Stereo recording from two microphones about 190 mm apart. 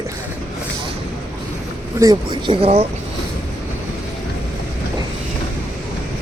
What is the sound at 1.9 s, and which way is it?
Speech, 20° right (ahead or behind).